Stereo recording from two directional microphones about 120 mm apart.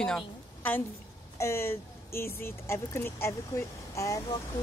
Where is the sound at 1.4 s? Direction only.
25° left (ahead or behind).